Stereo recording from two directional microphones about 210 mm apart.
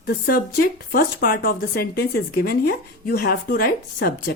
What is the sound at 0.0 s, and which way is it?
Speech, 45° left (ahead or behind).